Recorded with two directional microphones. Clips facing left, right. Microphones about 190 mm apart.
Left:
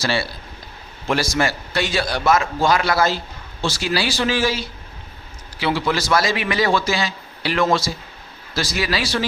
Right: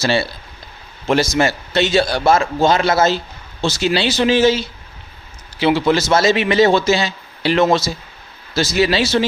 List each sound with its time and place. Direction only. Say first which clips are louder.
0.0 s a man's voice: right 5 dB; 25° right (ahead or behind)